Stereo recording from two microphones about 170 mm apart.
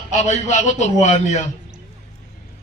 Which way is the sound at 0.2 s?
45° left (ahead or behind).